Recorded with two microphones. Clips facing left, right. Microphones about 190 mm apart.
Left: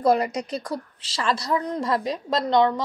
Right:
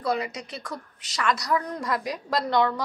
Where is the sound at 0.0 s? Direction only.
45° left (ahead or behind).